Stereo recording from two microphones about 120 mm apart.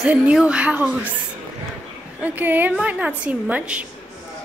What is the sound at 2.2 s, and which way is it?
A woman's voice, 15° right (ahead or behind).